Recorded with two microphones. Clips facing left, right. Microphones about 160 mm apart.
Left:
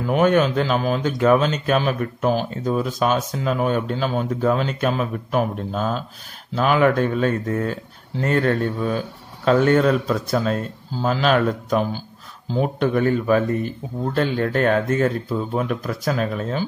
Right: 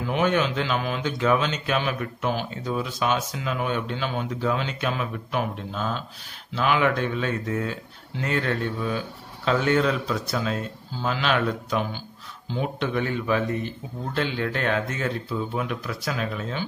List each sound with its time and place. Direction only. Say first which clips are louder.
0.0 s speech: left 6 dB; 45° left (ahead or behind)